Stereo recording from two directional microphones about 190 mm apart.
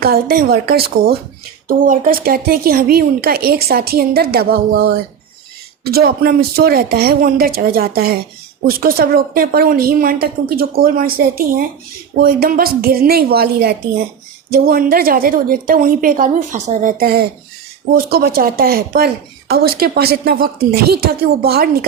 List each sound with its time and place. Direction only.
0.0 s a woman's voice: 55° right (ahead or behind)
12.2 s a woman's voice: 50° right (ahead or behind)